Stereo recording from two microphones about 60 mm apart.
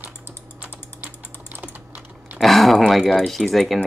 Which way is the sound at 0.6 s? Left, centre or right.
Right.